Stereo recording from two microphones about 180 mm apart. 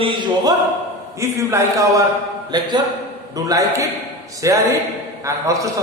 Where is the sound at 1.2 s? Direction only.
15° right (ahead or behind).